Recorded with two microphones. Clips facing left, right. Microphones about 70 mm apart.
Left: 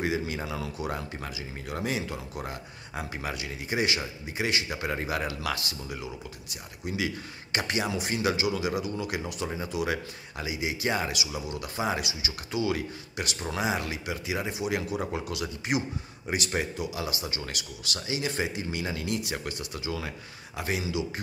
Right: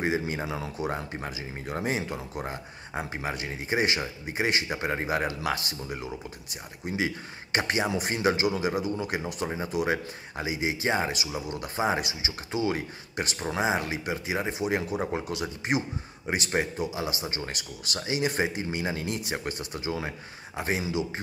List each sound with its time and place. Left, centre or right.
0.0 s speech: right